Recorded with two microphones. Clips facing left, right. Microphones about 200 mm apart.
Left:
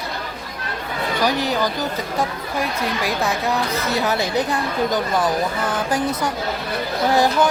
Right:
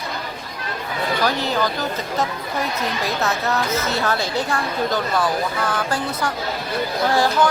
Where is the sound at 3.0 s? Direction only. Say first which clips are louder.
Left 1 dB; 15° left (ahead or behind).